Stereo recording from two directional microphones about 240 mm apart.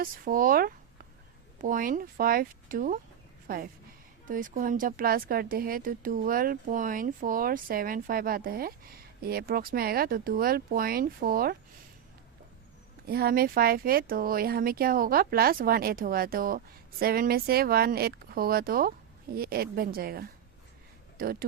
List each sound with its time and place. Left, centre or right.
0.0 s speech: right
13.1 s speech: right